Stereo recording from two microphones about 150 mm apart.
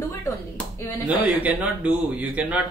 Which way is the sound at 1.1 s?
10° right (ahead or behind).